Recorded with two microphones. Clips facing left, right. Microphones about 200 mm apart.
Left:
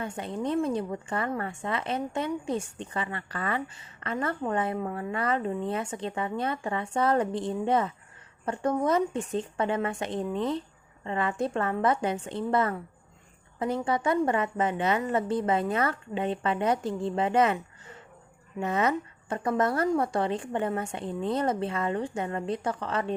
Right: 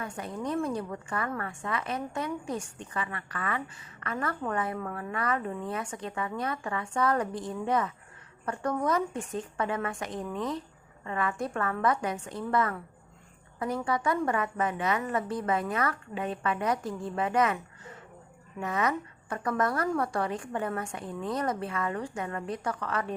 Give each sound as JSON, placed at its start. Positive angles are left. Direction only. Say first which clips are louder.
{"t": 0.0, "sound": "a woman's voice", "louder": "left 3 dB", "side_deg": 25}